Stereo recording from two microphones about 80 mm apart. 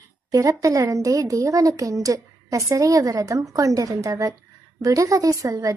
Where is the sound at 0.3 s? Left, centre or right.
Right.